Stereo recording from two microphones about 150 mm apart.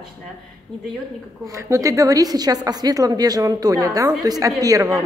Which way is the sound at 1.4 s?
20° right (ahead or behind).